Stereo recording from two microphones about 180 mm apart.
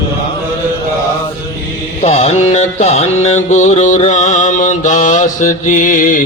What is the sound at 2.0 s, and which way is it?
Music, 40° left (ahead or behind).